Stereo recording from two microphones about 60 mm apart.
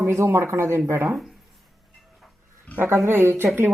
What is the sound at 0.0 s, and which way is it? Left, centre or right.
Speech, right.